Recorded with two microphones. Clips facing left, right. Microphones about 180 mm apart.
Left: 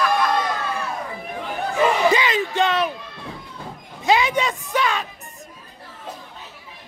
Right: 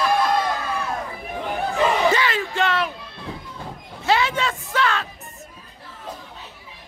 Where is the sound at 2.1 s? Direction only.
15° left (ahead or behind).